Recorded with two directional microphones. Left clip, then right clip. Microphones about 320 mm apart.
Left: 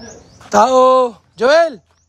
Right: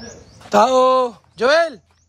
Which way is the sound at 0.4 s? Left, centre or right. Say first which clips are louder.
Left 3 dB; centre.